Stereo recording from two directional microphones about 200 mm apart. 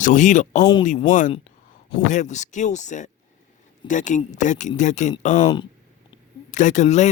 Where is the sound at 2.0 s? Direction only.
35° left (ahead or behind).